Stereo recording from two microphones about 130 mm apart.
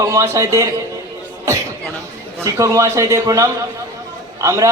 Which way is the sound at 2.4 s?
25° right (ahead or behind).